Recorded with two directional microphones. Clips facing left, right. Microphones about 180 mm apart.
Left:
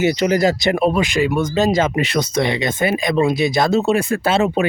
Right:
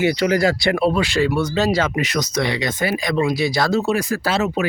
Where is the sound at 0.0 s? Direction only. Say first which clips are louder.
Left 1 dB; 20° left (ahead or behind).